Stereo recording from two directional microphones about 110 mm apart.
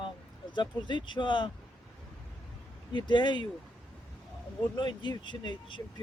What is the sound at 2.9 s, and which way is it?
Speech, 45° left (ahead or behind).